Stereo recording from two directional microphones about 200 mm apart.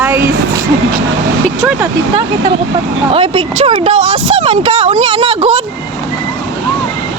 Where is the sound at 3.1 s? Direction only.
30° right (ahead or behind).